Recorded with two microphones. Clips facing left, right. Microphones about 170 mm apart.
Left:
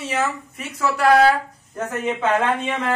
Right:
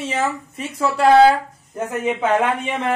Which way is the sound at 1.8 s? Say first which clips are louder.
Right 2 dB; 15° right (ahead or behind).